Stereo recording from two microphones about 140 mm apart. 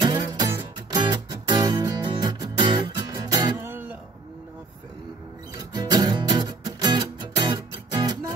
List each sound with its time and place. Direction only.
0.0 s music: 30° right (ahead or behind)
0.5 s music: 20° right (ahead or behind)
1.0 s music: 30° right (ahead or behind)
5.6 s music: 30° right (ahead or behind)